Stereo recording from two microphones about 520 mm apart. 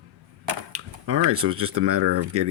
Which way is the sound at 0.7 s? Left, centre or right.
Right.